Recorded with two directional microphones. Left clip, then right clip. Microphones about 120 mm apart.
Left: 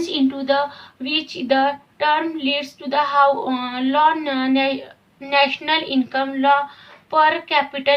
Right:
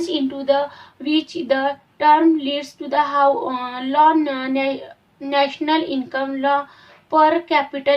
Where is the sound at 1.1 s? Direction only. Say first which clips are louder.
Right 1 dB; 65° right (ahead or behind).